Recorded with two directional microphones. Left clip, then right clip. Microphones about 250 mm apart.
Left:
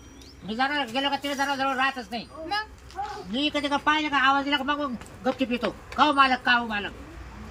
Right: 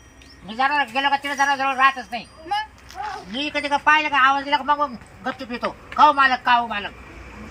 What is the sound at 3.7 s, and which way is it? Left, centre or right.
Speech, centre.